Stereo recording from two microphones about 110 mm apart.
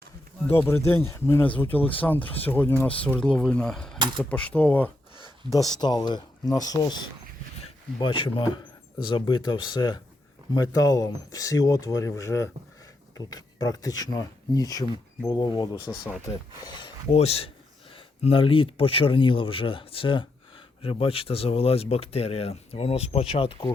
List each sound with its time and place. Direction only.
0.4 s speech: 20° left (ahead or behind)
5.8 s speech: 40° left (ahead or behind)
17.1 s speech: 70° left (ahead or behind)
17.9 s speech: 55° left (ahead or behind)